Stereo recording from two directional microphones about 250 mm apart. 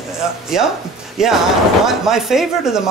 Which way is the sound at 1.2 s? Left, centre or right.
Centre.